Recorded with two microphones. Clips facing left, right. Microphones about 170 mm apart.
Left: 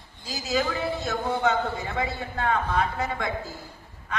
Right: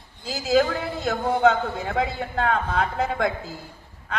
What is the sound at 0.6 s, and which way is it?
A man's voice, 60° right (ahead or behind).